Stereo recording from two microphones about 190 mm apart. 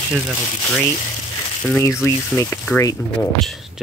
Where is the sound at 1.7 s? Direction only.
15° left (ahead or behind).